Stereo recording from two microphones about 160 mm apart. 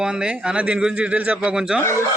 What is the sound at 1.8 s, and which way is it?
Speech, 15° left (ahead or behind).